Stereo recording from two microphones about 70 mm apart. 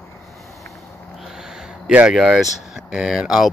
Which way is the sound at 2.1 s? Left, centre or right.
Centre.